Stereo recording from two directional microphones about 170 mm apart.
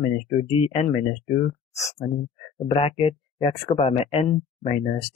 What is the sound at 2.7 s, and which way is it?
Speech, 35° left (ahead or behind).